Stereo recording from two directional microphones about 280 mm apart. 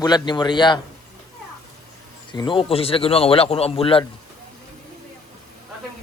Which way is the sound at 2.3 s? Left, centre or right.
Centre.